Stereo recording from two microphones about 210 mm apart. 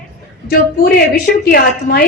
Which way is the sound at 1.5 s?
45° left (ahead or behind).